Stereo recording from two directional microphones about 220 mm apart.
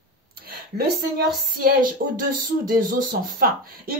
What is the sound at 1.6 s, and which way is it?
Speech, 40° right (ahead or behind).